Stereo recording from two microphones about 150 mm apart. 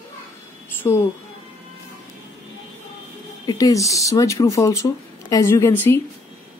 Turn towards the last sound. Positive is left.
turn(degrees=15)  # may be behind; listen again after turning